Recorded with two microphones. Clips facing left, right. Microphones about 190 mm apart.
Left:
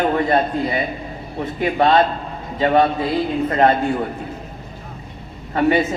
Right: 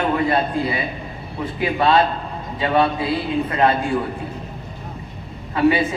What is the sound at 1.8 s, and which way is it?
A man's voice, 45° left (ahead or behind).